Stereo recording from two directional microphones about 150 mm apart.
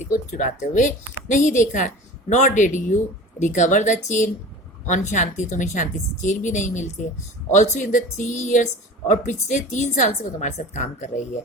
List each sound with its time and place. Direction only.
0.0 s a woman's voice: 55° left (ahead or behind)